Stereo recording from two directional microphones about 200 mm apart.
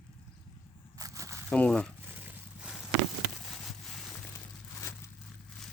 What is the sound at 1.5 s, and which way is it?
Speech, 5° left (ahead or behind).